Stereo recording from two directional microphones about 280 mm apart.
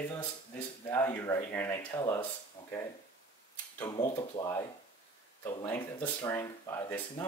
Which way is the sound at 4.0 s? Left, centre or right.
Centre.